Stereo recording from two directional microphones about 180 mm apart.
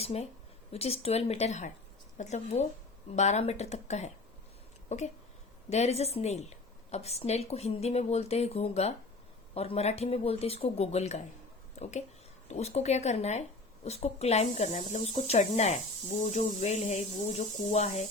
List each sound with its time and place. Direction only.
0.0 s speech: 35° left (ahead or behind)